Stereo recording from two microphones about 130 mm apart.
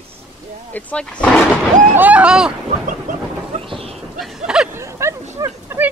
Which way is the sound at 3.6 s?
45° right (ahead or behind).